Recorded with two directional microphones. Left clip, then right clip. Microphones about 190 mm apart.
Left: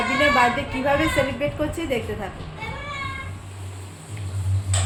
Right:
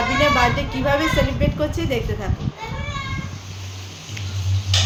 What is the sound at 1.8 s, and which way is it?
Speech, 10° left (ahead or behind).